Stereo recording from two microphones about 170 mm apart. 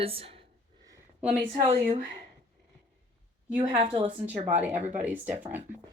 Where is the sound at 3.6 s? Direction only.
35° right (ahead or behind).